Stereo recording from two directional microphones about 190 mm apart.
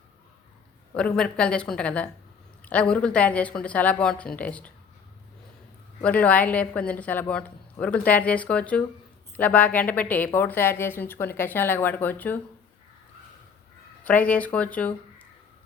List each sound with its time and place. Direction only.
0.9 s a woman's voice: 5° left (ahead or behind)
6.0 s a woman's voice: 5° left (ahead or behind)
14.0 s a woman's voice: 5° left (ahead or behind)